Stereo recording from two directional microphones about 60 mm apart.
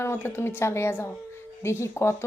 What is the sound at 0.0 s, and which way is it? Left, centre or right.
Speech, left.